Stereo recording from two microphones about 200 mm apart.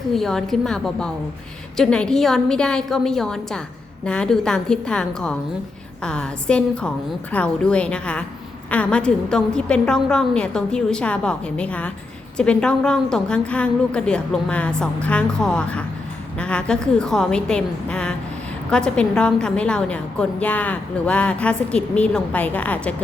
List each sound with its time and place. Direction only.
0.1 s a woman's voice: centre (ahead or behind)